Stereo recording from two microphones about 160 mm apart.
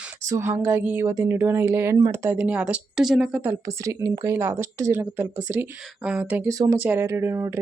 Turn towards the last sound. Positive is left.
turn(degrees=-15)  # may be behind; listen again after turning